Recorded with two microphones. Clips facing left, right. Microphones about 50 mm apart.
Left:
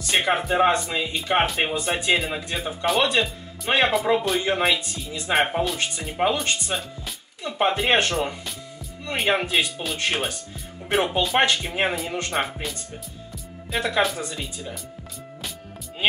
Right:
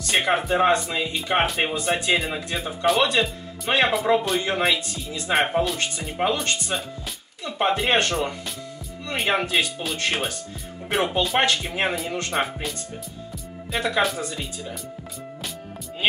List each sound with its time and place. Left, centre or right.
0.0 s speech: centre